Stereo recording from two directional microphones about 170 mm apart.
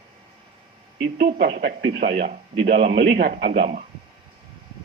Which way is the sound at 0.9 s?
85° right.